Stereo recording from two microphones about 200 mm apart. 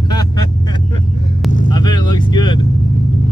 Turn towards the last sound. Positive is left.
turn(degrees=20)  # may be behind; listen again after turning